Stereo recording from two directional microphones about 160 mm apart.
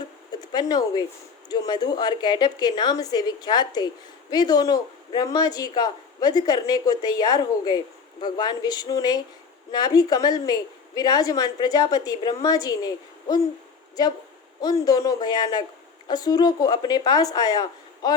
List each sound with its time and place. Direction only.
0.3 s a sound: 25° left (ahead or behind)
1.5 s a woman's voice: 25° left (ahead or behind)
14.6 s a woman's voice: 25° left (ahead or behind)